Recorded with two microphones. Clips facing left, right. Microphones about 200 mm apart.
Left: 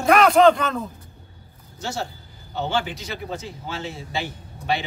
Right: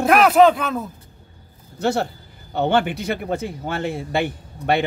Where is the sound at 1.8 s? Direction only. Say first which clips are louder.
Right 9 dB; 60° right (ahead or behind).